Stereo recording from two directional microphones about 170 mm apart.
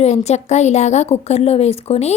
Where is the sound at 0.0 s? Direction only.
40° left (ahead or behind).